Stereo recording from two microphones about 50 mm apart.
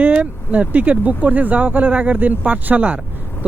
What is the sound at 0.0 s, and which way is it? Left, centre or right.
Speech, right.